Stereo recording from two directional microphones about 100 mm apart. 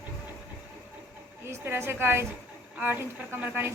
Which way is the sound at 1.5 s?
25° right (ahead or behind).